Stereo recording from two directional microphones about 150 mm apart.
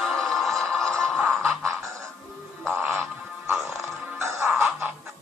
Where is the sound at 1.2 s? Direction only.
15° right (ahead or behind).